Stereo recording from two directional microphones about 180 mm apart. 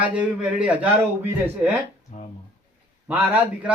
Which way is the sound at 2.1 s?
40° left (ahead or behind).